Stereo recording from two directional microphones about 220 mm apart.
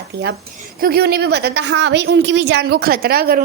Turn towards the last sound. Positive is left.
turn(degrees=-45)  # may be behind; listen again after turning